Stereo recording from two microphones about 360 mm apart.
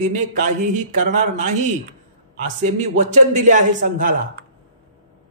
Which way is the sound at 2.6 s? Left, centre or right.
Centre.